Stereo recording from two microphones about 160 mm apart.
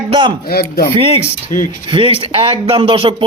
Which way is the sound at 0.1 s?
30° right (ahead or behind).